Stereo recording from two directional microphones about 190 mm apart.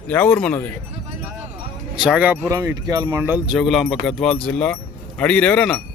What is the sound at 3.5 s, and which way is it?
Speech, centre (ahead or behind).